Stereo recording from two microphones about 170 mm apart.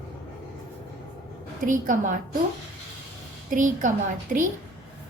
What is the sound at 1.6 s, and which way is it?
Speech, 50° right (ahead or behind).